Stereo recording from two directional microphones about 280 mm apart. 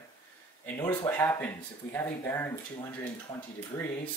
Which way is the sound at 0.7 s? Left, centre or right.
Centre.